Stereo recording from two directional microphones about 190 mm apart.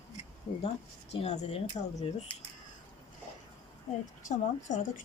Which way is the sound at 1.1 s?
35° left (ahead or behind).